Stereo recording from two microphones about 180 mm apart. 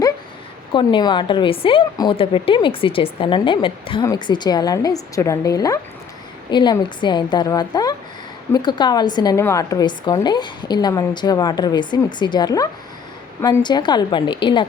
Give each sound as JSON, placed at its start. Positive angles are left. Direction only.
{"t": 0.7, "sound": "a woman's voice", "side_deg": 25}